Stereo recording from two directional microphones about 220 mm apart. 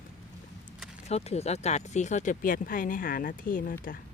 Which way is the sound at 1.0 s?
30° left (ahead or behind).